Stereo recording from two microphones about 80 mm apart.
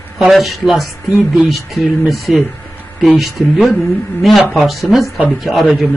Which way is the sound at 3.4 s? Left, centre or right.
Centre.